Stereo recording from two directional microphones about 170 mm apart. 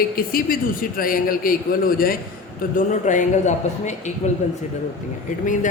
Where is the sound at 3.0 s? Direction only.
45° left (ahead or behind).